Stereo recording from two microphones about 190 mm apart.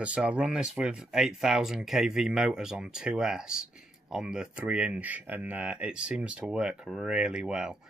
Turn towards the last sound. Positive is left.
turn(degrees=-5)  # may be behind; listen again after turning